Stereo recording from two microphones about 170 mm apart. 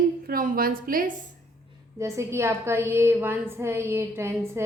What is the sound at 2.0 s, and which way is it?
A woman's voice, 15° right (ahead or behind).